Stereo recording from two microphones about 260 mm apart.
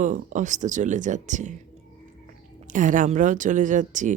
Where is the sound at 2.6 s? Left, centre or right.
Right.